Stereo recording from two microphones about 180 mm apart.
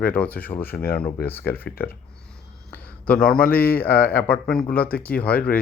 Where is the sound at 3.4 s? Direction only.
55° left (ahead or behind).